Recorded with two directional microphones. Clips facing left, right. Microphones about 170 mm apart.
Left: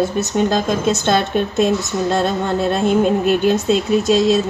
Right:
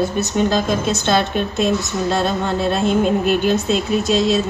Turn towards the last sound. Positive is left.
turn(degrees=45)  # may be behind; listen again after turning